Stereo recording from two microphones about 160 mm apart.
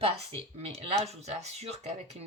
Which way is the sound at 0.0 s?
35° right (ahead or behind).